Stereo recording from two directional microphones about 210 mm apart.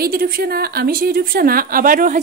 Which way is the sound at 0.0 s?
45° right (ahead or behind).